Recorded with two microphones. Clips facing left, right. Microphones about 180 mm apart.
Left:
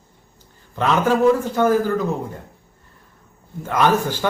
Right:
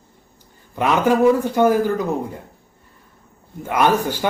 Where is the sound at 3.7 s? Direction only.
15° right (ahead or behind).